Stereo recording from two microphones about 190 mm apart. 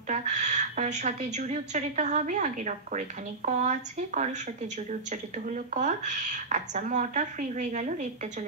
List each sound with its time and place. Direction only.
0.1 s a woman's voice: 40° right (ahead or behind)